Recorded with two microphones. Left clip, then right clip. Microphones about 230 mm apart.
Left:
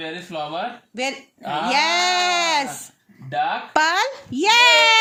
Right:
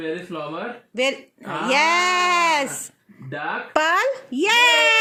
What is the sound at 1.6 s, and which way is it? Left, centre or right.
A child's voice, centre.